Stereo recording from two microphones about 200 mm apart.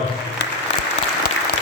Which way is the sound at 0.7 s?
65° left (ahead or behind).